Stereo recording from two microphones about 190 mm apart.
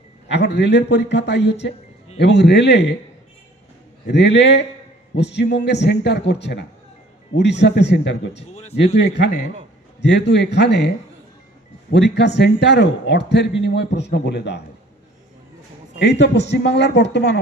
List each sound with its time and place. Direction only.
0.3 s a man's voice: 65° left (ahead or behind)
4.0 s a man's voice: 65° left (ahead or behind)
16.0 s a man's voice: 65° left (ahead or behind)